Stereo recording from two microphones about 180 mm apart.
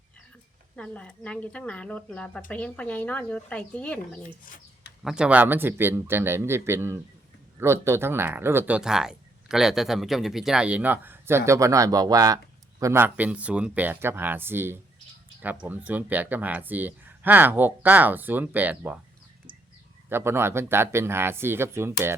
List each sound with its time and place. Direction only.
0.8 s speech: 5° left (ahead or behind)
4.2 s speech: 50° left (ahead or behind)
5.0 s speech: 5° right (ahead or behind)
20.1 s speech: 15° right (ahead or behind)